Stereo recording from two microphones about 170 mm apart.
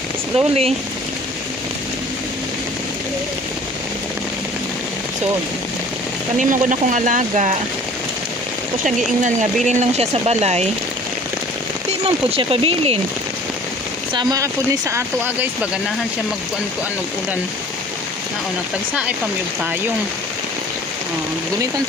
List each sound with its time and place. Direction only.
0.4 s speech: 35° right (ahead or behind)
6.3 s speech: 45° right (ahead or behind)
8.8 s speech: 45° right (ahead or behind)
11.9 s speech: 35° right (ahead or behind)
14.1 s speech: 20° right (ahead or behind)